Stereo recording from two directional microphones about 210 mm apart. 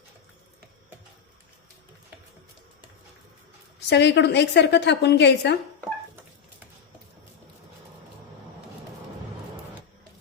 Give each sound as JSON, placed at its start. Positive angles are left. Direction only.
{"t": 3.8, "sound": "a woman's voice", "side_deg": 55}